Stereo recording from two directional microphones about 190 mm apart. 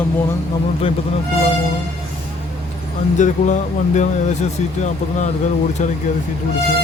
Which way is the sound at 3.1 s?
40° left (ahead or behind).